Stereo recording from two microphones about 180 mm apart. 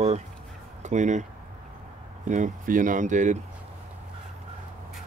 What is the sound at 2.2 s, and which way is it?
Speech, 45° right (ahead or behind).